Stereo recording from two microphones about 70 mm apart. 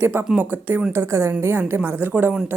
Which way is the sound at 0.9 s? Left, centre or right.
Right.